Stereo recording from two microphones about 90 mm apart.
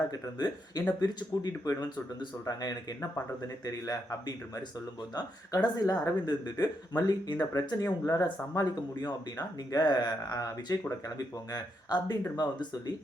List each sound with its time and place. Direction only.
0.1 s speech: 50° left (ahead or behind)